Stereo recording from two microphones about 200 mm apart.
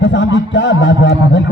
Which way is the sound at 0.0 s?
65° left (ahead or behind).